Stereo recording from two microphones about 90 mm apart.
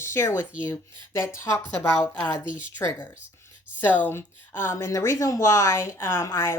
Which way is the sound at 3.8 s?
20° left (ahead or behind).